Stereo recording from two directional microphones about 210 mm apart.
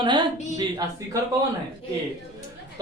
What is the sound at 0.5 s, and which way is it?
Speech, 20° right (ahead or behind).